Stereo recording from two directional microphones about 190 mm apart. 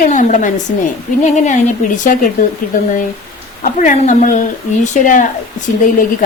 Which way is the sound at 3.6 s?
40° left (ahead or behind).